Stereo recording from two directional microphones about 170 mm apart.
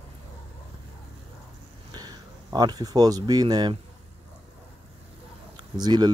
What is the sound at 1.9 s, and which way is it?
Speech, 25° right (ahead or behind).